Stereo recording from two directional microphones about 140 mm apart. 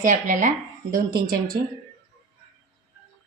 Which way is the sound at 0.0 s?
65° right (ahead or behind).